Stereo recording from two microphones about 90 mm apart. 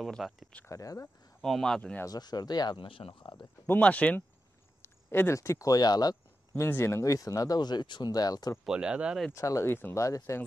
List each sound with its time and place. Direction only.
0.0 s speech: centre (ahead or behind)
0.7 s speech: 40° left (ahead or behind)
1.4 s speech: 5° left (ahead or behind)
2.0 s speech: 50° left (ahead or behind)
2.8 s speech: 85° left; by 3.4 s 65° left (ahead or behind)
3.6 s speech: 20° left (ahead or behind)
4.8 s speech: 25° left (ahead or behind); by 6.1 s 50° left (ahead or behind)
6.5 s speech: 25° left (ahead or behind); by 8.5 s 45° left (ahead or behind)
8.6 s speech: 10° right (ahead or behind)
9.3 s speech: 35° left (ahead or behind)
9.7 s speech: 25° left (ahead or behind)